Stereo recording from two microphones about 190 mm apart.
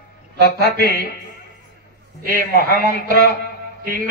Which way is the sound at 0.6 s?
55° left (ahead or behind).